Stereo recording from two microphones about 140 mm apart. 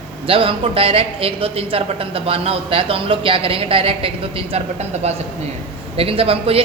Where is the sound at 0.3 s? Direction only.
40° right (ahead or behind).